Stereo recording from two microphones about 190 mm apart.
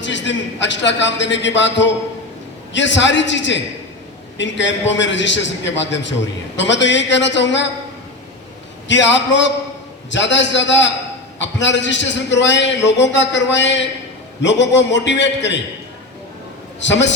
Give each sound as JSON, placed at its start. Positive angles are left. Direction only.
{"t": 0.0, "sound": "a man's voice", "side_deg": 70}
{"t": 8.9, "sound": "a man's voice", "side_deg": 70}
{"t": 16.8, "sound": "a man's voice", "side_deg": 70}